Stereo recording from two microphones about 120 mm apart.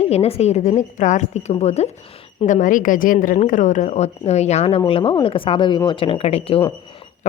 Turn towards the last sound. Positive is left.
turn(degrees=55)  # may be behind; listen again after turning